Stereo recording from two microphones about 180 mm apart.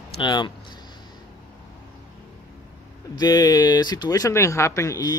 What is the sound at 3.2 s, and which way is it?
Speech, 20° left (ahead or behind).